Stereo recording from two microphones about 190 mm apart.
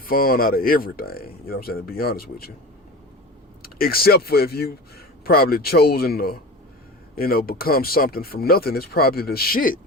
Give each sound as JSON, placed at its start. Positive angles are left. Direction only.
{"t": 0.0, "sound": "speech", "side_deg": 50}
{"t": 3.6, "sound": "speech", "side_deg": 50}